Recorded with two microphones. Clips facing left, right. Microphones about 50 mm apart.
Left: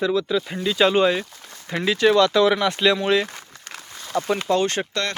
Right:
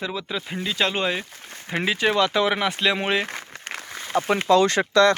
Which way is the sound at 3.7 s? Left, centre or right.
Right.